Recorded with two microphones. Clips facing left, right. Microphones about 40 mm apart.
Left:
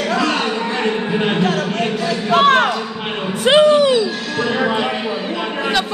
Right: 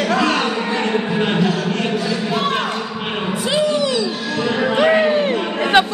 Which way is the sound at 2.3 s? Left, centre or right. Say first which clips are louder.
Left 10 dB; left.